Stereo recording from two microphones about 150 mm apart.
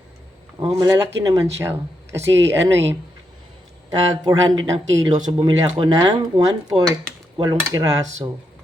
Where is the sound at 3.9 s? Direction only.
25° right (ahead or behind).